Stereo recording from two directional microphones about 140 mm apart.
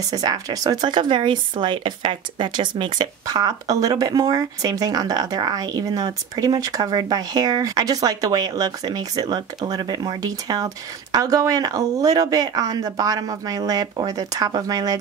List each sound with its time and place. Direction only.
0.1 s speech: 30° right (ahead or behind)